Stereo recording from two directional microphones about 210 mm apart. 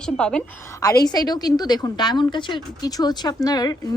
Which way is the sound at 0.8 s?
15° left (ahead or behind).